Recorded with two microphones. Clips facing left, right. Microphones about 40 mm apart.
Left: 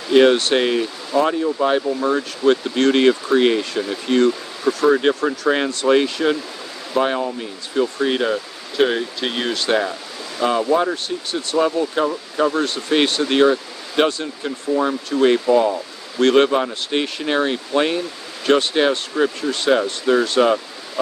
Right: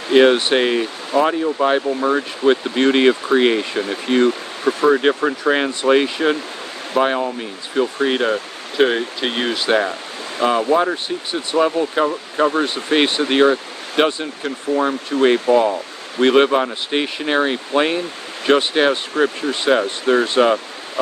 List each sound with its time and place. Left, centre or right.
0.1 s speech: right
15.1 s speech: right
16.2 s speech: right